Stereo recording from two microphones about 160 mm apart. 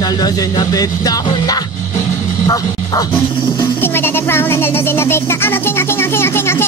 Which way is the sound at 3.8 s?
15° left (ahead or behind).